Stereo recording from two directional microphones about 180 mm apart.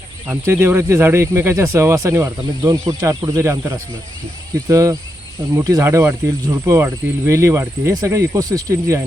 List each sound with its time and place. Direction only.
0.3 s speech: 10° right (ahead or behind)